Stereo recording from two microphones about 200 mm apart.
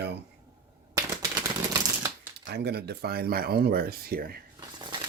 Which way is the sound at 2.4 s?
55° right (ahead or behind).